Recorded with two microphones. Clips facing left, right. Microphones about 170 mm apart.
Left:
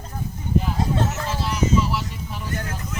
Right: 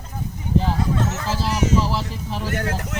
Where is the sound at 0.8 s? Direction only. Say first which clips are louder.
Even; 35° left (ahead or behind).